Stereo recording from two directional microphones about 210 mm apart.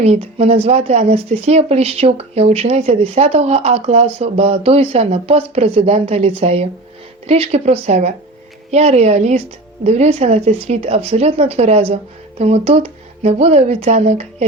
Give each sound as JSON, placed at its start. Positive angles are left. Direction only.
{"t": 0.0, "sound": "speech", "side_deg": -30}